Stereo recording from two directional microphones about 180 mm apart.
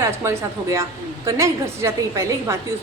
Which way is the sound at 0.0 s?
15° right (ahead or behind).